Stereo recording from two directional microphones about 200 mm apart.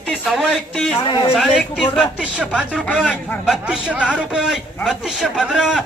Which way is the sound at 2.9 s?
10° left (ahead or behind).